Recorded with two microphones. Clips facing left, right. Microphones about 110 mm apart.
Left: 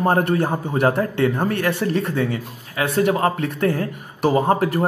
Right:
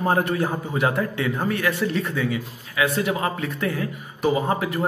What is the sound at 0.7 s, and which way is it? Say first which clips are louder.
Speech: left 5 dB; 55° left (ahead or behind).